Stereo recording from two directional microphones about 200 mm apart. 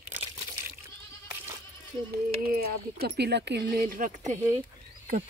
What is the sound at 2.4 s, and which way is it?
Speech, 50° right (ahead or behind).